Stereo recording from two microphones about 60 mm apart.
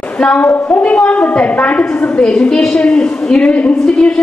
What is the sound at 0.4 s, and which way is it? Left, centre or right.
A woman's voice, left.